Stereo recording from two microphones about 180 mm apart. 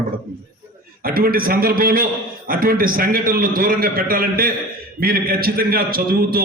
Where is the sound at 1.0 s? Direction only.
55° right (ahead or behind).